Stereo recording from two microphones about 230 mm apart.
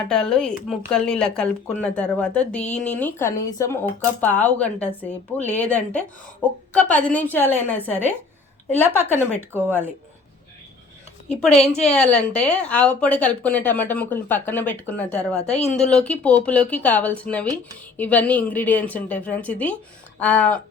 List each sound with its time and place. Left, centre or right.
0.1 s speech: centre
11.7 s speech: left
11.9 s speech: centre
15.4 s speech: left
15.8 s speech: centre